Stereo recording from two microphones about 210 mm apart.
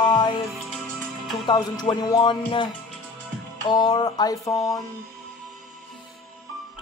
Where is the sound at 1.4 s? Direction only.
20° left (ahead or behind).